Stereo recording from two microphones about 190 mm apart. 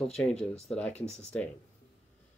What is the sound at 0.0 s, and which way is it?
Speech, 5° left (ahead or behind).